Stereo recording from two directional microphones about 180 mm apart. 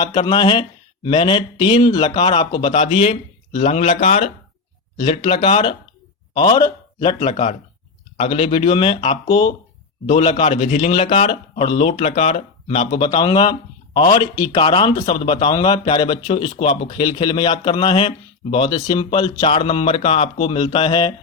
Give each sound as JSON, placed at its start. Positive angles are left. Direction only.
{"t": 0.0, "sound": "a man's voice", "side_deg": 25}